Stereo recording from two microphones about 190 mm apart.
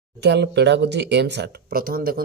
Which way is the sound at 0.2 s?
65° right (ahead or behind).